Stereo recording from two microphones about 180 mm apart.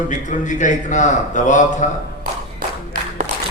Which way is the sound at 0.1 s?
45° left (ahead or behind).